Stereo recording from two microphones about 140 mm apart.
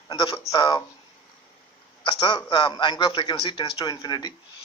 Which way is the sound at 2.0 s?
35° left (ahead or behind).